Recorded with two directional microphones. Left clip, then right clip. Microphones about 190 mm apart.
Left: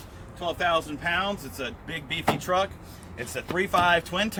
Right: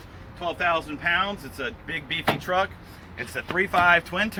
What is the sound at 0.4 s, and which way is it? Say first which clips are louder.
Speech: right 1 dB; 20° left (ahead or behind).